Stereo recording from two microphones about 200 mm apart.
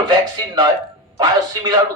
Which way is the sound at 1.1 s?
20° right (ahead or behind).